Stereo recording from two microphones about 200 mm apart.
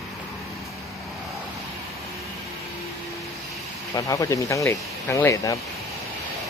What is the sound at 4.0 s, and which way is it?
Speech, 15° left (ahead or behind).